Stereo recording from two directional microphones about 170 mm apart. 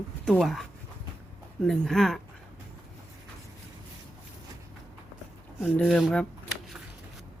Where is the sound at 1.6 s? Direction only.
Centre (ahead or behind).